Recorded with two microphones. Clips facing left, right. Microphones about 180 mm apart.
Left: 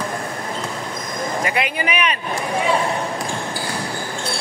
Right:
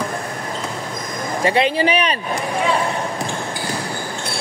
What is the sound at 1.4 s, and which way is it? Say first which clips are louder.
Speech: right 9 dB; 30° right (ahead or behind).